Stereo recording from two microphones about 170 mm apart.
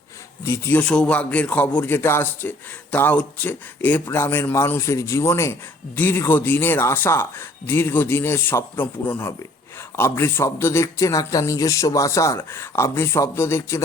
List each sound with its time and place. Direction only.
0.4 s a man's voice: 15° left (ahead or behind)